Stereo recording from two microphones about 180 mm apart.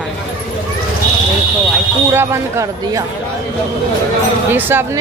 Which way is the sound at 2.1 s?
15° right (ahead or behind).